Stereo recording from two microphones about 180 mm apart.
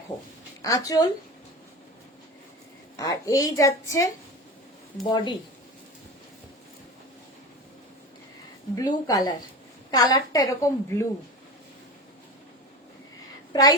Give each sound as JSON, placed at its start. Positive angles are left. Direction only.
{"t": 0.6, "sound": "a woman's voice", "side_deg": 20}
{"t": 2.9, "sound": "a woman's voice", "side_deg": 20}
{"t": 8.7, "sound": "a woman's voice", "side_deg": 20}
{"t": 13.5, "sound": "a woman's voice", "side_deg": 20}